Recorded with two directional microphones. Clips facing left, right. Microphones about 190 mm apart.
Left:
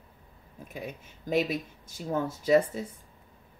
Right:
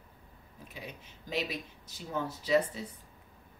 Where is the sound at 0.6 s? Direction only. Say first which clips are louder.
Left 7 dB; 50° left (ahead or behind).